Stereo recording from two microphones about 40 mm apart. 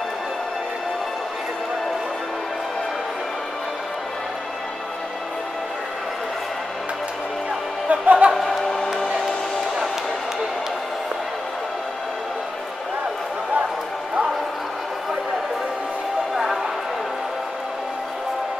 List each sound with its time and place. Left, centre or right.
7.9 s speech: right